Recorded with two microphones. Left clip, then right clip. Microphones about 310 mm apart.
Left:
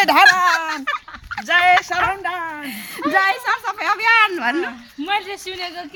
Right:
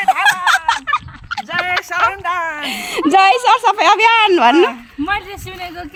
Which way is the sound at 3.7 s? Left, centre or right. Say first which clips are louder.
Right 9 dB; right.